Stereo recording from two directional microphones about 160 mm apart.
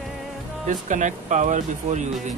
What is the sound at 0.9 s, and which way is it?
Speech, 50° right (ahead or behind).